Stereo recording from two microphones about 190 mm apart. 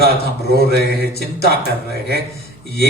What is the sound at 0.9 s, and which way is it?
Speech, 55° left (ahead or behind).